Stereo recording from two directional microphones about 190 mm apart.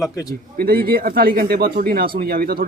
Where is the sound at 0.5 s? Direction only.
50° right (ahead or behind).